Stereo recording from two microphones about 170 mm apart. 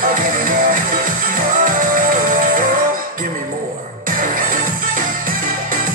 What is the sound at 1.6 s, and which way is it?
Music, 55° right (ahead or behind).